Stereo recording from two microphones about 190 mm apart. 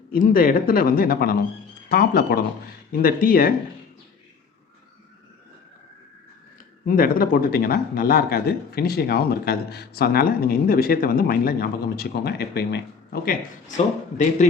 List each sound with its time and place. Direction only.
0.1 s speech: 50° left (ahead or behind)
6.8 s speech: 50° left (ahead or behind)
13.7 s speech: 40° left (ahead or behind)